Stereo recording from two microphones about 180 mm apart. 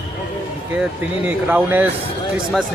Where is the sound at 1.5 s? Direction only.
10° right (ahead or behind).